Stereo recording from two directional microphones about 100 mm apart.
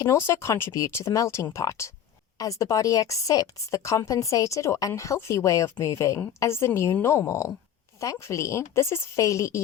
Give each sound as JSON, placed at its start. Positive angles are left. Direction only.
{"t": 0.0, "sound": "a woman's voice", "side_deg": 25}